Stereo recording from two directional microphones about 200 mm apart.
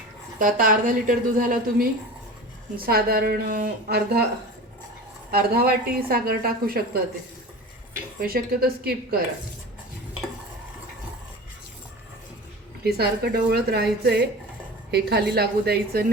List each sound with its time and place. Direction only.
0.3 s a woman's voice: 40° right (ahead or behind)
5.3 s a woman's voice: 50° right (ahead or behind)
8.2 s a woman's voice: 45° right (ahead or behind)
12.8 s a woman's voice: 50° right (ahead or behind)